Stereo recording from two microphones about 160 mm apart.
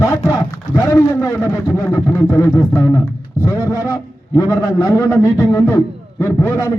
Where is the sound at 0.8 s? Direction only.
15° left (ahead or behind).